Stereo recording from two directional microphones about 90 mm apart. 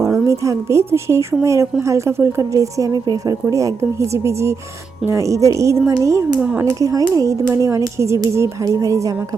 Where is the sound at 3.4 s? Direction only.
30° right (ahead or behind).